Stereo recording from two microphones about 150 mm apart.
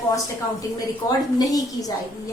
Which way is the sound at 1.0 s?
20° left (ahead or behind).